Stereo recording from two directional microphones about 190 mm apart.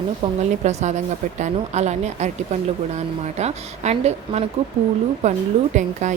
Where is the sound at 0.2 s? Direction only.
25° right (ahead or behind).